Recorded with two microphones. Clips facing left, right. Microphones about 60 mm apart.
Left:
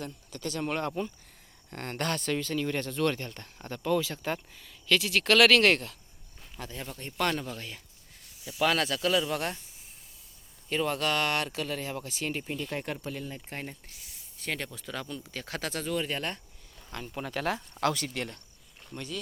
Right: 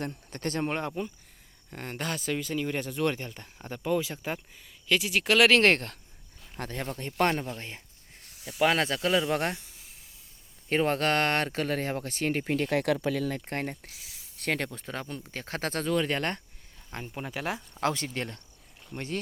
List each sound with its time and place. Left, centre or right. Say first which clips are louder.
0.0 s speech: right 4 dB; right
0.6 s speech: even; right
0.9 s speech: left 1 dB; centre; by 7.3 s right
7.4 s speech: right 1 dB; right
8.3 s snake: right 2 dB; right
8.6 s speech: right 2 dB; right
10.7 s speech: right 3 dB; right
13.5 s speech: right 6 dB; right
14.0 s speech: right 5 dB; right
17.1 s speech: left 2 dB; centre; by 19.2 s right